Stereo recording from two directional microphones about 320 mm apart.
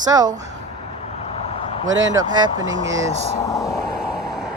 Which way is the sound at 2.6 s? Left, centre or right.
Right.